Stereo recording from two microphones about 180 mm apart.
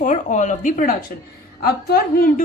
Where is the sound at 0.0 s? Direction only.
45° left (ahead or behind).